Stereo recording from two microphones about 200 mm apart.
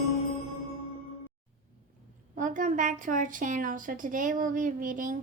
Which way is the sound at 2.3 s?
40° right (ahead or behind).